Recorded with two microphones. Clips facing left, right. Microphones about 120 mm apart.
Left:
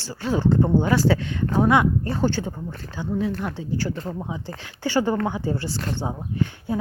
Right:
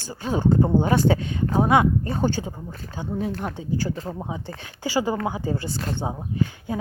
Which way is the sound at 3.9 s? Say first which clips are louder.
Even; 5° right (ahead or behind).